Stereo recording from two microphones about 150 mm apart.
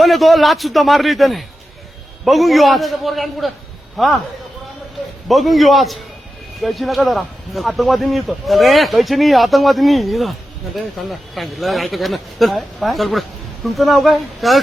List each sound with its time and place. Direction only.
0.0 s a man's voice: centre (ahead or behind)
5.3 s speech: centre (ahead or behind)